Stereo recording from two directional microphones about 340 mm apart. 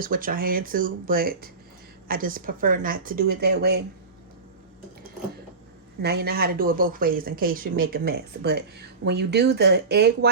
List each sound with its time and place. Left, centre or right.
0.0 s speech: right
6.0 s speech: right